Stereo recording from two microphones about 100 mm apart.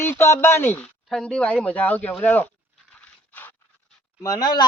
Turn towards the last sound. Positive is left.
turn(degrees=45)  # may be behind; listen again after turning